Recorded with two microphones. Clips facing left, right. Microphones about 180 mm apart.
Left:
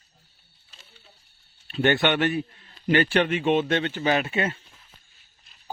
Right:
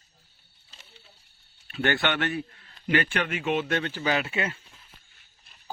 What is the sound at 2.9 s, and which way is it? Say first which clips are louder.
A man's voice: left 5 dB; 35° left (ahead or behind).